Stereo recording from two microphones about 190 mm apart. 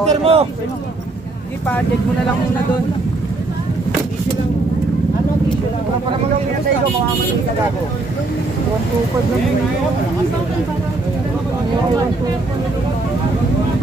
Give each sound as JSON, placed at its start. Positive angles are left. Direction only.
{"t": 0.1, "sound": "speech", "side_deg": -30}